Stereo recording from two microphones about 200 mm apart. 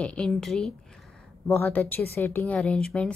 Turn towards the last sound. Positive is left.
turn(degrees=5)  # may be behind; listen again after turning